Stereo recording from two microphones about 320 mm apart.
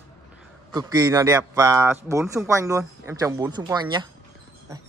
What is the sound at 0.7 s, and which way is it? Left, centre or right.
A man's voice, centre.